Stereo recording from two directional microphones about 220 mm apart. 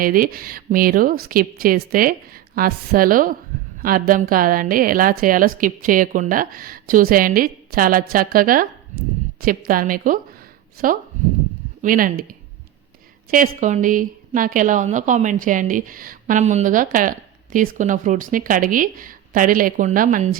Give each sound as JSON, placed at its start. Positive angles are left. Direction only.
{"t": 0.0, "sound": "a woman's voice", "side_deg": -40}
{"t": 11.8, "sound": "a woman's voice", "side_deg": -40}